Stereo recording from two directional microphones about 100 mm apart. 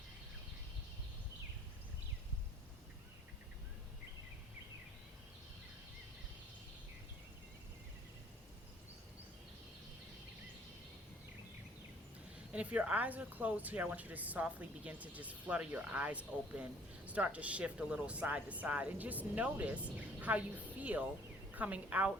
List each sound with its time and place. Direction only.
12.5 s a woman's voice: 10° right (ahead or behind)